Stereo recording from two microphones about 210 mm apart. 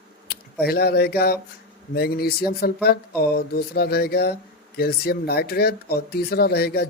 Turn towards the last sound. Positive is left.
turn(degrees=50)  # may be behind; listen again after turning